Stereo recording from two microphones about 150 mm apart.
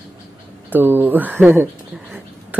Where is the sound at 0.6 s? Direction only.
15° right (ahead or behind).